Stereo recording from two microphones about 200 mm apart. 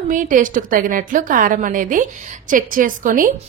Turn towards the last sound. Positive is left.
turn(degrees=-40)  # may be behind; listen again after turning